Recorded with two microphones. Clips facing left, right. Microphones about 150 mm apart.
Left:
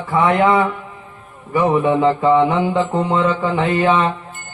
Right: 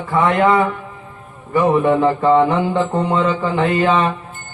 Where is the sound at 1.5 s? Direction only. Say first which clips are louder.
Right 1 dB; 15° left (ahead or behind).